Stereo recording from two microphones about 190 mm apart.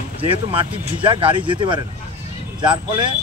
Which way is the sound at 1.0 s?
25° right (ahead or behind).